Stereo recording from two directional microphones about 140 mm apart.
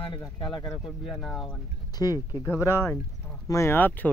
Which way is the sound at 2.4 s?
20° left (ahead or behind).